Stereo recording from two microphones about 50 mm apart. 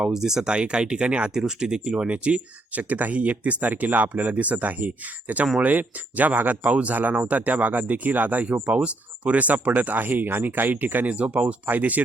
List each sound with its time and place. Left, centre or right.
0.0 s speech: centre; by 12.0 s right